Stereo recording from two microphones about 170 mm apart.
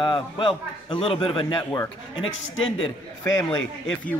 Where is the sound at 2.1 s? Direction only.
30° left (ahead or behind).